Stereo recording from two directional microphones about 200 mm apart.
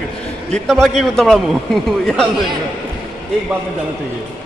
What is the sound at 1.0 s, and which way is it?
A man's voice, 5° left (ahead or behind).